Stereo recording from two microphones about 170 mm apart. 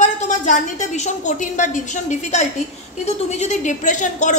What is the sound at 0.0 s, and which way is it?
A woman's voice, 45° left (ahead or behind).